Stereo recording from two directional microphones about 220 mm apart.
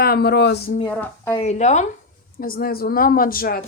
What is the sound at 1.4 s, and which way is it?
Speech, 30° left (ahead or behind).